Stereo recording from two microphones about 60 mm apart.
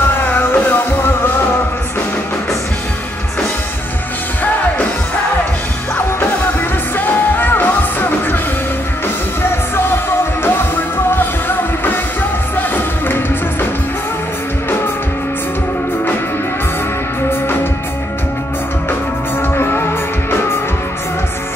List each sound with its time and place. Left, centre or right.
0.3 s music: left
7.3 s music: left
10.4 s music: left
19.4 s music: left